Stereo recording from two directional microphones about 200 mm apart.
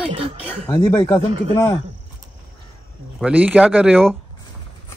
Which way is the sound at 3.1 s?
5° right (ahead or behind).